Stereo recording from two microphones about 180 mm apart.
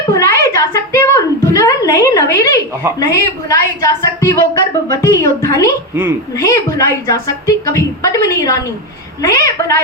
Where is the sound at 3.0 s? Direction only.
20° left (ahead or behind).